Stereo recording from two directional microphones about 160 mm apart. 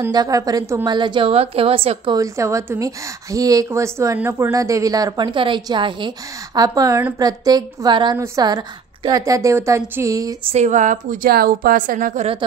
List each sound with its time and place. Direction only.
0.0 s a woman's voice: 25° right (ahead or behind)
2.1 s a woman's voice: 20° right (ahead or behind)
10.5 s a woman's voice: 45° right (ahead or behind)